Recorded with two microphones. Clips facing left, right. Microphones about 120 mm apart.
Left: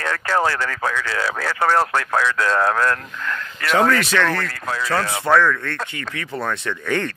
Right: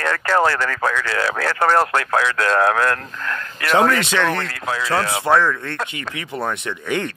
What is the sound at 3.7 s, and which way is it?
Speech, 20° right (ahead or behind).